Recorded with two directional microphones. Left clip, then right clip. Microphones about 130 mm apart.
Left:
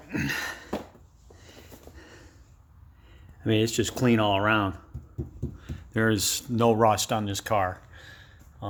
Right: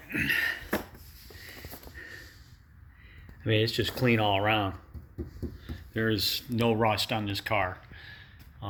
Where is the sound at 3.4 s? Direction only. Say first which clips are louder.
Left 2 dB; 55° left (ahead or behind).